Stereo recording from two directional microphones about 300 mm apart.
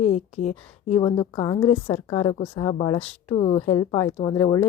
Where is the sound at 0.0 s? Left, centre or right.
Left.